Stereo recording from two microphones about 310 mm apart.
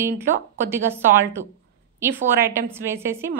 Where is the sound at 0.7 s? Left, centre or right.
Centre.